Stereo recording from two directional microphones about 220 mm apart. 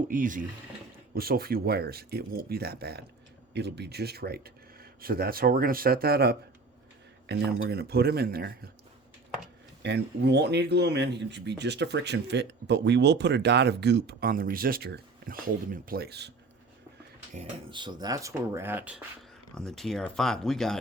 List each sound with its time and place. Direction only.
0.1 s speech: 35° right (ahead or behind)
9.8 s speech: 50° right (ahead or behind)
17.3 s speech: 35° right (ahead or behind)
17.7 s speech: 20° right (ahead or behind); by 20.7 s centre (ahead or behind)